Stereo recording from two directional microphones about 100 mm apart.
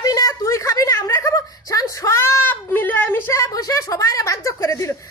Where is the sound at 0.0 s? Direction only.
35° left (ahead or behind); by 3.3 s 20° left (ahead or behind).